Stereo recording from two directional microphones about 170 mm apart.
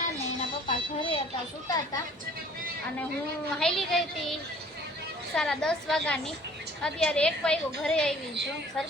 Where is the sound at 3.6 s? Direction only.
Centre (ahead or behind).